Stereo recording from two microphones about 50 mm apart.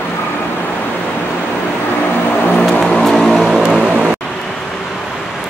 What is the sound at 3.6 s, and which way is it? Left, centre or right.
Vehicle, centre.